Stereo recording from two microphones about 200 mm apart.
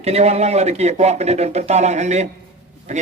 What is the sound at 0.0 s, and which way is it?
A man's voice, 30° right (ahead or behind).